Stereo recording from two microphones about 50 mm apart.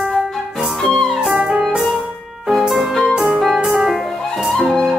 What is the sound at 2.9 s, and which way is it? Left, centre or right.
Music, centre.